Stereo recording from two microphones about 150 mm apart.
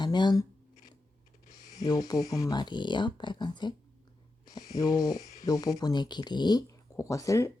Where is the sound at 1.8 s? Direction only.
25° left (ahead or behind).